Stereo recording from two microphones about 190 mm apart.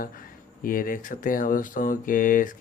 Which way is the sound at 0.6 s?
45° left (ahead or behind).